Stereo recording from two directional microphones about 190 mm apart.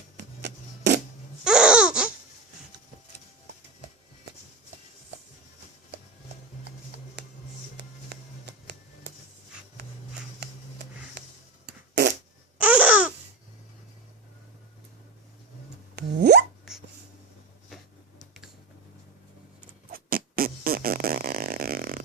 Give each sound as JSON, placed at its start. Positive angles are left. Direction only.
{"t": 0.4, "sound": "a sound", "side_deg": -60}
{"t": 1.5, "sound": "babbling", "side_deg": -5}
{"t": 7.8, "sound": "music", "side_deg": -60}
{"t": 11.2, "sound": "a sound", "side_deg": -60}
{"t": 11.6, "sound": "fart", "side_deg": -60}
{"t": 12.5, "sound": "babbling", "side_deg": -5}
{"t": 16.0, "sound": "plop", "side_deg": -60}
{"t": 19.9, "sound": "fart", "side_deg": -50}